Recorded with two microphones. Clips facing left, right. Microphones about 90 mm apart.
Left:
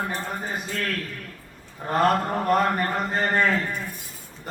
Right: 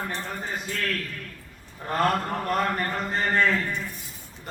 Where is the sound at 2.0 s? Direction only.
20° left (ahead or behind).